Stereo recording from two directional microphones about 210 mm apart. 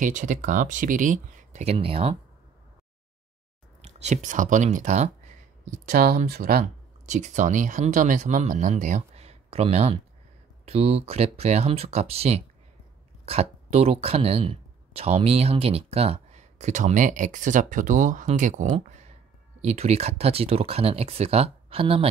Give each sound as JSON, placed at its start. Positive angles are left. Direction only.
{"t": 0.0, "sound": "speech", "side_deg": -35}
{"t": 3.8, "sound": "speech", "side_deg": -35}
{"t": 5.9, "sound": "speech", "side_deg": -45}